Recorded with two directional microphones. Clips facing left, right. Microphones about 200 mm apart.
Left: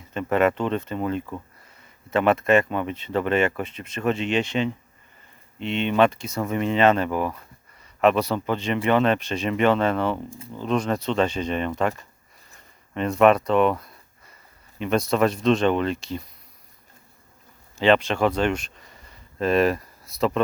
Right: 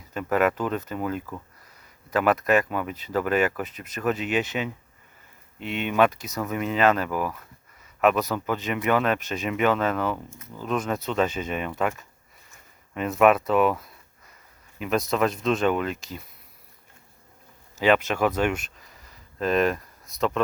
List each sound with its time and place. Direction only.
0.1 s speech: 5° right (ahead or behind)
8.4 s speech: 5° right (ahead or behind)
10.2 s speech: 30° left (ahead or behind)
10.6 s speech: 5° right (ahead or behind)
12.5 s a sound: 5° right (ahead or behind)
14.8 s speech: centre (ahead or behind)
17.7 s speech: 5° right (ahead or behind)